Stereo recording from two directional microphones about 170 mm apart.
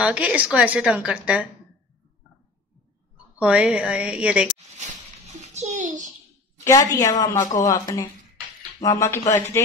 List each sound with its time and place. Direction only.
0.0 s a woman's voice: 5° right (ahead or behind)
3.3 s a woman's voice: 5° right (ahead or behind)
5.4 s a sound: 45° right (ahead or behind)
6.6 s a woman's voice: 20° left (ahead or behind)